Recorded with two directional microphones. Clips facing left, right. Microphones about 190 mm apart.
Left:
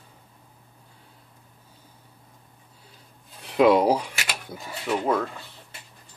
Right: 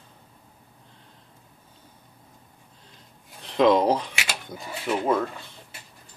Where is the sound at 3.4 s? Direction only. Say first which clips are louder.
Left 1 dB; 10° left (ahead or behind).